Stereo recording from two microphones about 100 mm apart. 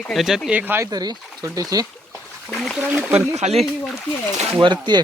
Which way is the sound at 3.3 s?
90° right.